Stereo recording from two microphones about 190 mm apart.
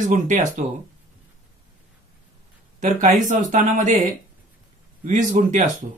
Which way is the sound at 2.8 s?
40° right (ahead or behind).